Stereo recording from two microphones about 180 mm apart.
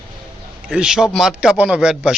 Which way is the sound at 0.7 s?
5° right (ahead or behind).